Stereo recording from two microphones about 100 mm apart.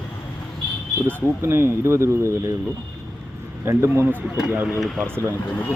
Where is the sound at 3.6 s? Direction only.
30° right (ahead or behind).